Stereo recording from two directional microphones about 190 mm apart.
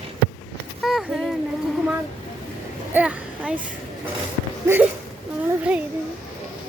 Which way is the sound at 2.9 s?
5° right (ahead or behind).